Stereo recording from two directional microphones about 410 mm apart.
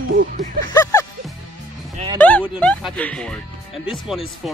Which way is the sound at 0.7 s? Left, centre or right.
Centre.